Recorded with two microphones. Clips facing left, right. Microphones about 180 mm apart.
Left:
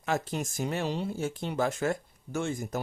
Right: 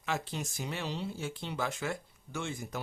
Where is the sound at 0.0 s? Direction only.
45° left (ahead or behind).